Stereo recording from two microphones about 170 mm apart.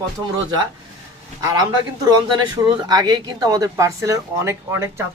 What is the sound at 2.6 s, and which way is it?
Speech, 25° right (ahead or behind).